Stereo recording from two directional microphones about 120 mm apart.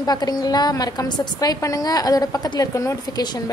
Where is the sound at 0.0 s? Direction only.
35° left (ahead or behind).